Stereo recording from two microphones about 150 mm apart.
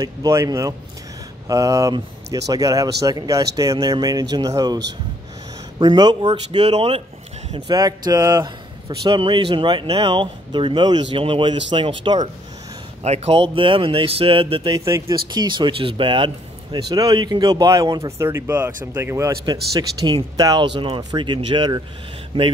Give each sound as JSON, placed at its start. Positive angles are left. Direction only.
{"t": 0.0, "sound": "speech", "side_deg": -20}
{"t": 5.8, "sound": "speech", "side_deg": -30}
{"t": 6.2, "sound": "speech", "side_deg": -45}
{"t": 7.5, "sound": "speech", "side_deg": -25}
{"t": 13.0, "sound": "speech", "side_deg": -45}
{"t": 14.9, "sound": "speech", "side_deg": -20}
{"t": 15.1, "sound": "speech", "side_deg": -30}